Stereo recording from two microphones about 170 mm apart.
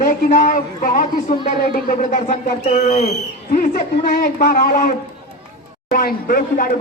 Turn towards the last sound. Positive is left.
turn(degrees=55)  # may be behind; listen again after turning